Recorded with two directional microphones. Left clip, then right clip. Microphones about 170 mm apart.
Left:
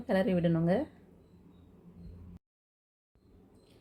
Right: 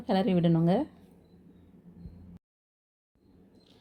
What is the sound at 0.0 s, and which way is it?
Speech, 20° right (ahead or behind).